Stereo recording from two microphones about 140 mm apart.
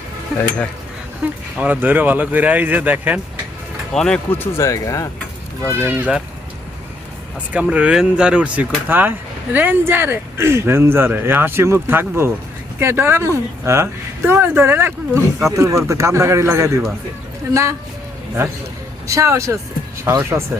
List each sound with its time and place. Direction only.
1.5 s speech: 10° right (ahead or behind)
3.9 s speech: 5° left (ahead or behind); by 5.0 s 25° left (ahead or behind)
5.8 s speech: 15° right (ahead or behind)
7.5 s a man's voice: 10° right (ahead or behind)
19.0 s a man's voice: 20° right (ahead or behind)